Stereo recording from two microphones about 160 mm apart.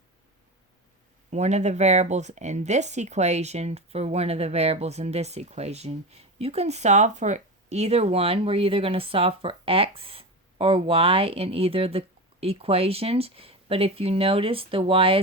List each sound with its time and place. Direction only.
1.3 s speech: 45° right (ahead or behind)